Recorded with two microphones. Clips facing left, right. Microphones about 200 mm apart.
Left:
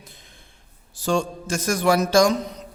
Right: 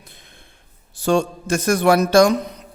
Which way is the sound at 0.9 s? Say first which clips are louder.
Right 4 dB; 60° right (ahead or behind).